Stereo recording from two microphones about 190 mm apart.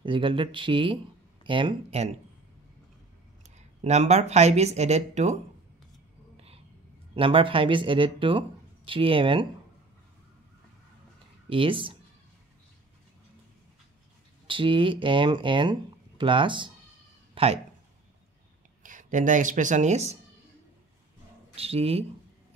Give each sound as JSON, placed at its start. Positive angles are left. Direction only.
{"t": 0.0, "sound": "speech", "side_deg": -25}
{"t": 3.4, "sound": "speech", "side_deg": -35}
{"t": 6.3, "sound": "whispering", "side_deg": -30}
{"t": 7.2, "sound": "speech", "side_deg": -30}
{"t": 11.4, "sound": "speech", "side_deg": -25}
{"t": 14.5, "sound": "speech", "side_deg": -25}
{"t": 17.3, "sound": "a sound", "side_deg": -30}
{"t": 18.8, "sound": "speech", "side_deg": -45}
{"t": 21.5, "sound": "speech", "side_deg": -30}